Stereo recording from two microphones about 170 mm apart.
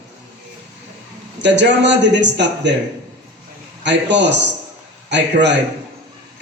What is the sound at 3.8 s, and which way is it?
A man's voice, 90° right.